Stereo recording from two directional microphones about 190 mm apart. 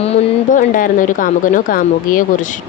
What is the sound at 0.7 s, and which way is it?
A woman's voice, 45° left (ahead or behind).